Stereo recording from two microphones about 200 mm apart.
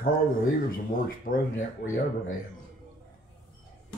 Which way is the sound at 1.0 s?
45° left (ahead or behind).